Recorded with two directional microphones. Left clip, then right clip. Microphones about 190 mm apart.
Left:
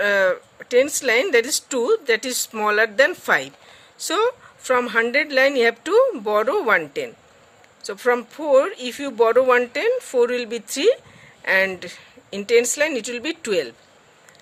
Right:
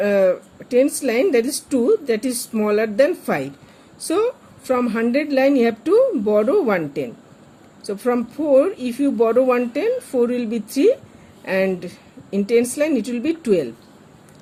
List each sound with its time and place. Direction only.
0.0 s speech: 40° left (ahead or behind)